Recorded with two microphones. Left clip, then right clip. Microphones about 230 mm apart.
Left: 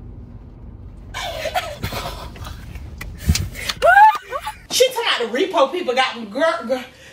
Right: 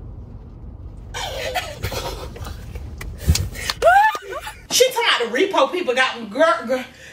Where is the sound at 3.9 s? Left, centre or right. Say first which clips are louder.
Left 6 dB; centre.